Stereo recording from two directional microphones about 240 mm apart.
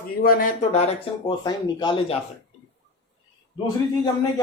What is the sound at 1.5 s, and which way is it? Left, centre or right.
Speech, centre.